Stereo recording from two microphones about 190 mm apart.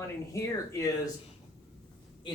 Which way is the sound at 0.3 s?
15° left (ahead or behind).